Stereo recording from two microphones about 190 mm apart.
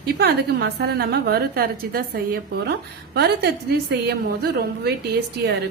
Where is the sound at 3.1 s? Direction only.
60° right (ahead or behind).